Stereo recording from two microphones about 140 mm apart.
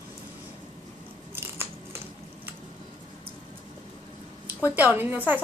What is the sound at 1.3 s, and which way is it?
Scissors, 15° right (ahead or behind).